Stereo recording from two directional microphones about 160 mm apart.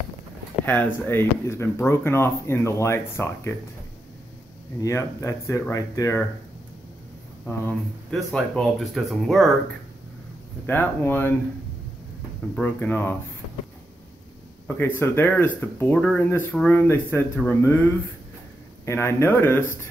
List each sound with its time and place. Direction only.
0.7 s speech: 15° left (ahead or behind)
4.8 s speech: 20° left (ahead or behind)
7.4 s speech: 5° left (ahead or behind)
10.7 s speech: 10° left (ahead or behind)
12.5 s speech: 10° left (ahead or behind)
14.8 s speech: 15° left (ahead or behind)
18.9 s speech: 15° left (ahead or behind)